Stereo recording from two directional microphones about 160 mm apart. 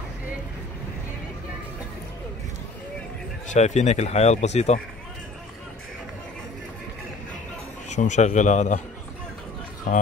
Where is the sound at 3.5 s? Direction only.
45° left (ahead or behind).